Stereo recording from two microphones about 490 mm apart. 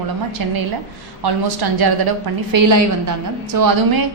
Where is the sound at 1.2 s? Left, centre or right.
Right.